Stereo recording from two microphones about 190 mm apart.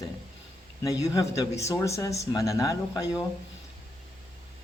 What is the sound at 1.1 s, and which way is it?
Speech, 15° left (ahead or behind).